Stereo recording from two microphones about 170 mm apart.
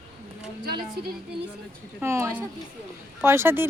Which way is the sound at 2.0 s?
15° right (ahead or behind).